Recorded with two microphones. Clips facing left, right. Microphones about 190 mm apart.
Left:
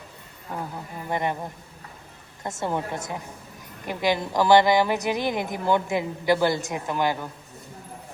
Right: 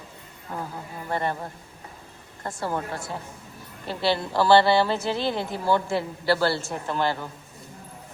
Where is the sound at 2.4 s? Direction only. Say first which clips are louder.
Left 1 dB; 20° left (ahead or behind).